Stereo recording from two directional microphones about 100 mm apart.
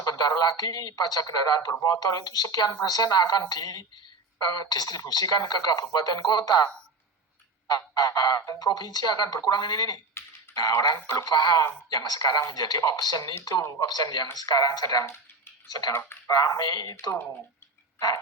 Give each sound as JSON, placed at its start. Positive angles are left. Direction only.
{"t": 0.0, "sound": "speech", "side_deg": 40}
{"t": 7.7, "sound": "speech", "side_deg": 40}
{"t": 15.9, "sound": "speech", "side_deg": 25}
{"t": 16.3, "sound": "speech", "side_deg": 35}